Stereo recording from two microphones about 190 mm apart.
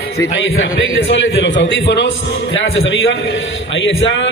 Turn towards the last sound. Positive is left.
turn(degrees=80)